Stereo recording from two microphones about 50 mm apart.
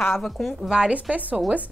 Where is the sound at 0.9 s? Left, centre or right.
Right.